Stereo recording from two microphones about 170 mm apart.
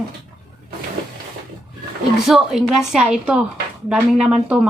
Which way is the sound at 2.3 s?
Centre (ahead or behind).